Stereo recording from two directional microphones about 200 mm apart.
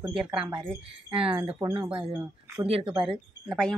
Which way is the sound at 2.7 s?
25° right (ahead or behind).